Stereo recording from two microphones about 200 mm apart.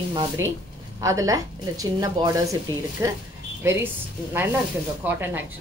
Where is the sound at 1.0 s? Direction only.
15° right (ahead or behind).